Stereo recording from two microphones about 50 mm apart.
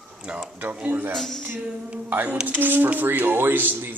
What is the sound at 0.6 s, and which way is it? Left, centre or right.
Speech, right.